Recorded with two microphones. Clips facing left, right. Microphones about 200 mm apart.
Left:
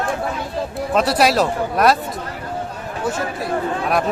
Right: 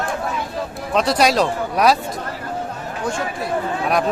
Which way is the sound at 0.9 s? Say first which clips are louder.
Even; 5° left (ahead or behind).